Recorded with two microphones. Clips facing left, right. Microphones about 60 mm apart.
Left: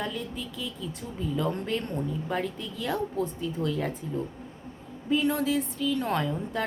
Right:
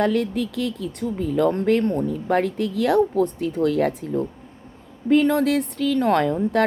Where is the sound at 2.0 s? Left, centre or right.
Right.